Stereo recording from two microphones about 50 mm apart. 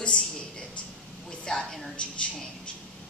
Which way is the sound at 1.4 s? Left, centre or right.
Centre.